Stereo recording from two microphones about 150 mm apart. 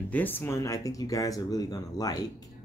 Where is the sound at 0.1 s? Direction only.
10° left (ahead or behind).